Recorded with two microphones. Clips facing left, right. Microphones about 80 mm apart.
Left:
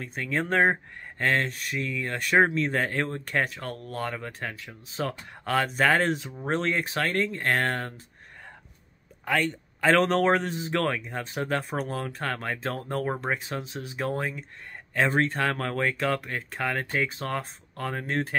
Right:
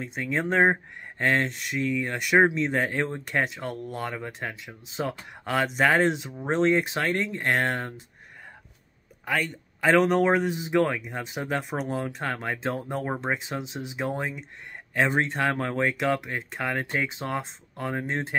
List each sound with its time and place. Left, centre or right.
0.0 s speech: centre
9.2 s speech: centre